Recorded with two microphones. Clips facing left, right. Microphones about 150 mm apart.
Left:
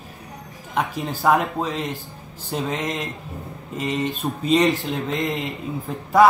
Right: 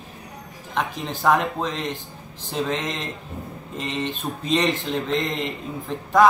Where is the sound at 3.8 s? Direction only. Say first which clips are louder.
Left 3 dB; 10° left (ahead or behind).